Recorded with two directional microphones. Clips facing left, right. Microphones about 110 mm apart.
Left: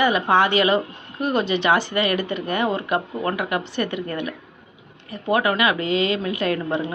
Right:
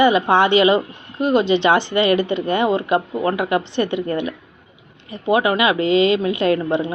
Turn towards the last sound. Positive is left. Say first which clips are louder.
# right 5 dB
turn(degrees=-25)  # may be behind; listen again after turning